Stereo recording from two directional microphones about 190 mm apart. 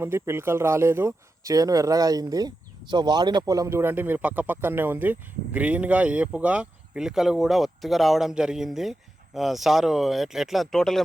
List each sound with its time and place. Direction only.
0.0 s speech: 15° right (ahead or behind); by 11.0 s centre (ahead or behind)